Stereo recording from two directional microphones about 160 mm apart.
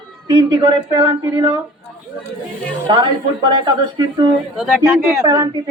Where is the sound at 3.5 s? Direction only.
30° right (ahead or behind).